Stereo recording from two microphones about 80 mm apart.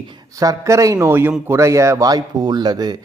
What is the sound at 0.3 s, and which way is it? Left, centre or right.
A man's voice, right.